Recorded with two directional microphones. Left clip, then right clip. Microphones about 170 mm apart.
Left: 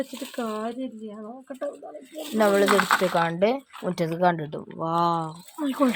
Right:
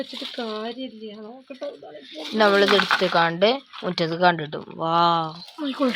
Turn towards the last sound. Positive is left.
turn(degrees=20)  # may be behind; listen again after turning